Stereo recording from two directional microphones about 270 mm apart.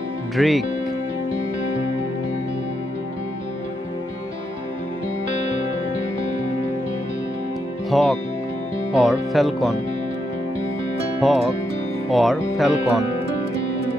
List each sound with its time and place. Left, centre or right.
0.4 s speech: centre
7.9 s music: centre
8.9 s speech: centre
11.2 s speech: centre